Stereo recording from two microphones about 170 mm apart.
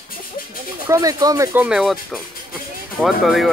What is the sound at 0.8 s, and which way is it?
Speech, 20° right (ahead or behind).